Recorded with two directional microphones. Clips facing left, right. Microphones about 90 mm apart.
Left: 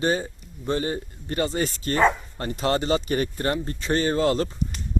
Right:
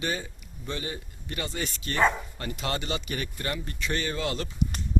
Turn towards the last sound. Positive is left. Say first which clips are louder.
# left 9 dB
turn(degrees=40)  # may be behind; listen again after turning